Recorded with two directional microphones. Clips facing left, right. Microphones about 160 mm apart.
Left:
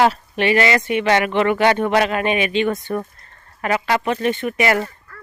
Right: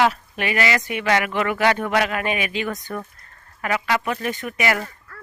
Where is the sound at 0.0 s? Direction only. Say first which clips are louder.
Left 4 dB; 30° left (ahead or behind).